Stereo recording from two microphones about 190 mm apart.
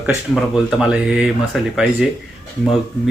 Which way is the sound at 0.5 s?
Centre (ahead or behind).